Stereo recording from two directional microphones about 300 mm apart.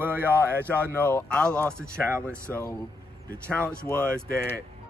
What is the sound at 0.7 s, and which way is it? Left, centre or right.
Speech, centre.